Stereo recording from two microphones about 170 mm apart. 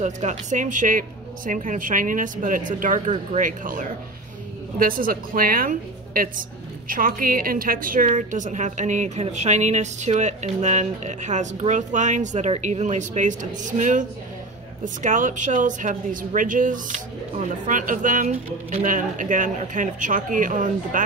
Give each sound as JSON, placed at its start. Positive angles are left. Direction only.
{"t": 0.0, "sound": "a woman's voice", "side_deg": -45}